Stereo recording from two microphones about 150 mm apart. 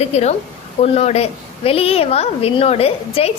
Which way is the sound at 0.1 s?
45° left (ahead or behind).